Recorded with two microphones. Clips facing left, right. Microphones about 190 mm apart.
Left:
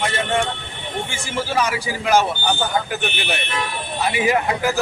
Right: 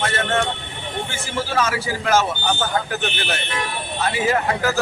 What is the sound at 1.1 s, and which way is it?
Speech, 15° left (ahead or behind).